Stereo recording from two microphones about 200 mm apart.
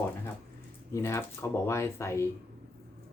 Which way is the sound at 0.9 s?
15° left (ahead or behind).